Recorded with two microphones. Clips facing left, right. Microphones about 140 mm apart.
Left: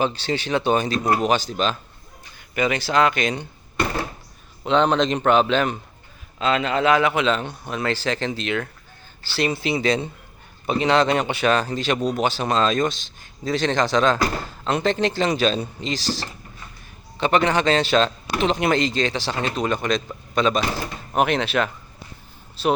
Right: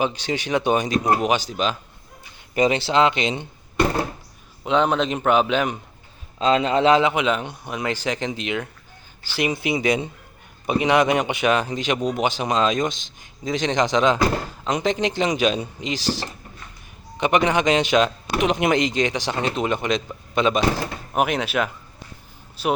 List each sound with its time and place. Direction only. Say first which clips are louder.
0.0 s a man's voice: left 1 dB; 15° right (ahead or behind)
2.6 s speech: right 2 dB; 25° right (ahead or behind)
4.6 s a man's voice: left 1 dB; 10° right (ahead or behind)
6.4 s a man's voice: right 3 dB; 30° right (ahead or behind); by 22.7 s 10° right (ahead or behind)